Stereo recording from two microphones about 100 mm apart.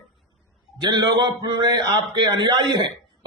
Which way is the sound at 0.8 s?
45° right (ahead or behind).